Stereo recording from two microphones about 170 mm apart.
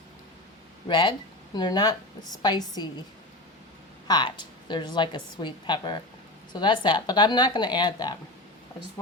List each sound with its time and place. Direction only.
0.9 s a woman's voice: 25° left (ahead or behind)
4.0 s a woman's voice: 25° left (ahead or behind)